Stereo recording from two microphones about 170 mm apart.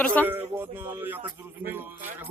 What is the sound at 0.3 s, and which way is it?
Speech, 10° right (ahead or behind).